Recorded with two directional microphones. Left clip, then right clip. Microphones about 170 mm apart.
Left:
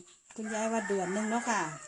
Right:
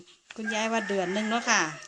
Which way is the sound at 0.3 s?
10° right (ahead or behind).